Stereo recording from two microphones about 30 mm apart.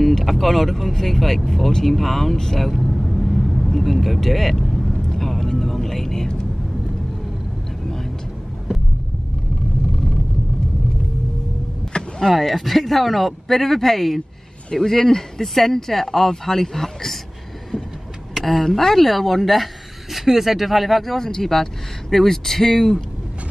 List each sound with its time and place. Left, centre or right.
0.0 s speech: centre
2.6 s vehicle: centre
5.1 s a sound: centre
11.9 s power windows: left
12.4 s speech: centre
18.4 s speech: centre
21.2 s speech: centre